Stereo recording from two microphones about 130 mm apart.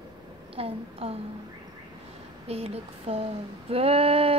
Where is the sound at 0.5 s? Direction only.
50° right (ahead or behind).